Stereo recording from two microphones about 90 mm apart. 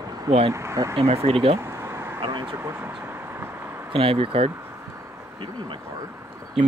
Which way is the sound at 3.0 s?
25° right (ahead or behind).